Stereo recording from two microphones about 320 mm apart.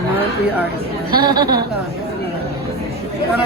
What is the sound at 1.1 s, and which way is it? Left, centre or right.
Speech, centre.